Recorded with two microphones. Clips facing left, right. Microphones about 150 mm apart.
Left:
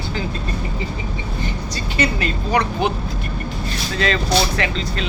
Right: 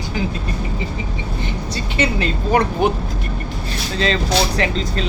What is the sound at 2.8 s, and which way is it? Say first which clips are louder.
Speech: right 3 dB; 45° right (ahead or behind).